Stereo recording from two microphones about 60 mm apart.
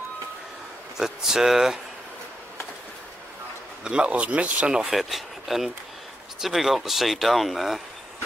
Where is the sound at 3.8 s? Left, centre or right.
Centre.